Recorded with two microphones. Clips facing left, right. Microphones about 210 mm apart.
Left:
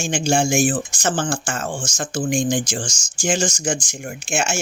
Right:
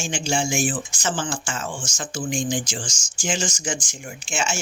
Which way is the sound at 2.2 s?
65° left (ahead or behind).